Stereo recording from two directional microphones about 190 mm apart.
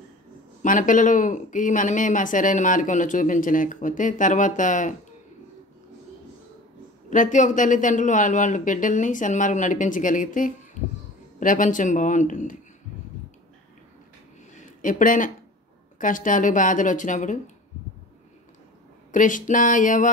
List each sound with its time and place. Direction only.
0.6 s speech: 40° left (ahead or behind)
7.1 s speech: 40° left (ahead or behind)
14.5 s a sound: 45° left (ahead or behind)
16.0 s speech: 45° left (ahead or behind)
19.1 s speech: 45° left (ahead or behind)